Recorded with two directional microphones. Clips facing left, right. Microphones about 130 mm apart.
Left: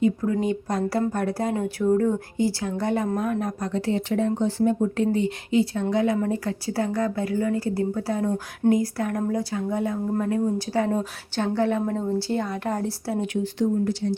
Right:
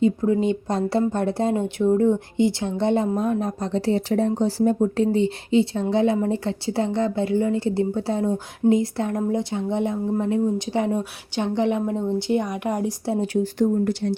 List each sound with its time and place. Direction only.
0.0 s a woman's voice: 25° right (ahead or behind)
13.2 s speech: 40° right (ahead or behind)